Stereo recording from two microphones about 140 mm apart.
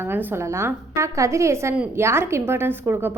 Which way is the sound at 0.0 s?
15° right (ahead or behind).